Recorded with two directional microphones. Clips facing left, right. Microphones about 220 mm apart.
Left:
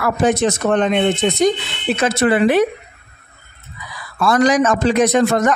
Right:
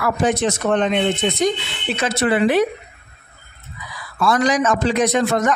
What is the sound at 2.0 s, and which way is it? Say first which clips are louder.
Speech: left 3 dB; 50° left (ahead or behind).